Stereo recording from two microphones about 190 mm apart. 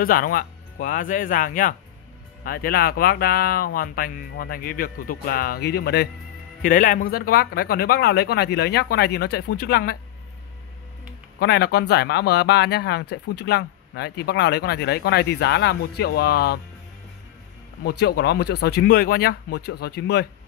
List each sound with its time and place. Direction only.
0.0 s speech: 50° left (ahead or behind)
6.6 s speech: 45° left (ahead or behind)
11.3 s speech: 60° left (ahead or behind)
17.8 s speech: 60° left (ahead or behind)